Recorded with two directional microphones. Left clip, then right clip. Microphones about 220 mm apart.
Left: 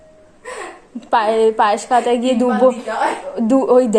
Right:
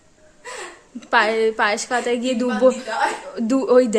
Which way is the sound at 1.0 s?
15° right (ahead or behind).